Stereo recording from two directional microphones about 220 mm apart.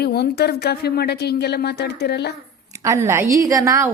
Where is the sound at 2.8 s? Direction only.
15° right (ahead or behind).